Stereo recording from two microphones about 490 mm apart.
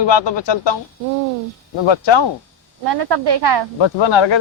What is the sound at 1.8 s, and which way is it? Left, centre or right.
Speech, left.